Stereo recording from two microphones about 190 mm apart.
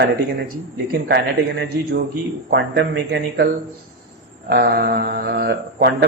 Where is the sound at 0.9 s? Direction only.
55° right (ahead or behind).